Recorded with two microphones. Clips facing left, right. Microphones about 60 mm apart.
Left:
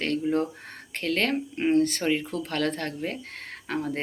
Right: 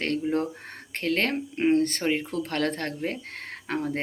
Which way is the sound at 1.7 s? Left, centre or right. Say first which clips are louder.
Left 4 dB; right.